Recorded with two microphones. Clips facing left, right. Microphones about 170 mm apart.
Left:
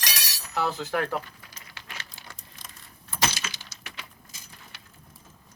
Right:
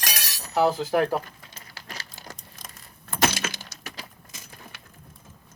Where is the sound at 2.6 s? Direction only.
45° right (ahead or behind).